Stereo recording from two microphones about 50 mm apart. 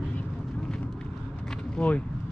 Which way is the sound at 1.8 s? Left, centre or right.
Centre.